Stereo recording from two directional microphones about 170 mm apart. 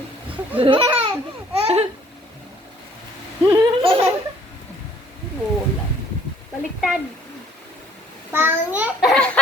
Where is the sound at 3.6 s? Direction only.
30° right (ahead or behind).